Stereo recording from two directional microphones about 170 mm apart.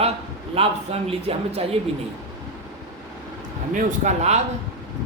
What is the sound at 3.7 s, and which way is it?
Speech, 45° right (ahead or behind).